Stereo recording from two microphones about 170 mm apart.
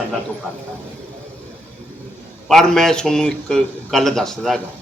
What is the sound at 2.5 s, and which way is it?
A man's voice, centre (ahead or behind).